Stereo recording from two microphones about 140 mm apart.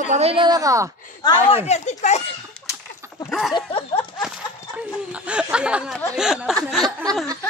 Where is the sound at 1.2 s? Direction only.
30° left (ahead or behind).